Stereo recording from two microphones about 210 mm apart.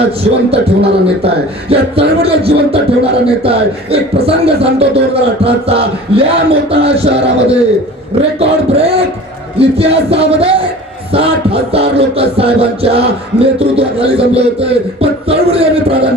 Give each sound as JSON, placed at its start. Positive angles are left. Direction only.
{"t": 0.5, "sound": "music", "side_deg": -25}